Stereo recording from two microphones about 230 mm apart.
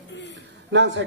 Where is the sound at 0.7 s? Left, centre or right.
Right.